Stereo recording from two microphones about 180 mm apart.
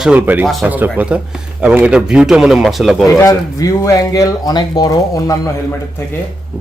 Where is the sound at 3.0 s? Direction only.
15° left (ahead or behind).